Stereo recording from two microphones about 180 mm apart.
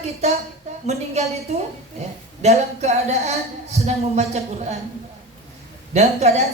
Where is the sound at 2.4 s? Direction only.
40° right (ahead or behind).